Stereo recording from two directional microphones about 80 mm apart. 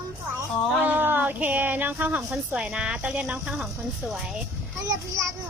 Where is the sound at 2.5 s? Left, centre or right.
Centre.